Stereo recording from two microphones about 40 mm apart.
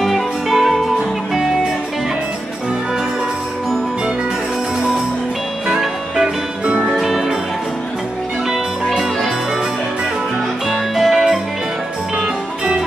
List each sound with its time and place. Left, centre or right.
0.0 s music: centre
5.7 s music: centre
6.2 s music: right
6.9 s music: centre
10.7 s music: centre